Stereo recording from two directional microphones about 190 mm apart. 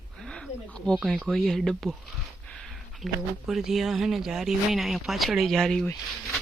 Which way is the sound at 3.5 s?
Centre (ahead or behind).